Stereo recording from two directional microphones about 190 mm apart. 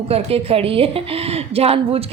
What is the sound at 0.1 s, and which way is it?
A woman's voice, 30° right (ahead or behind).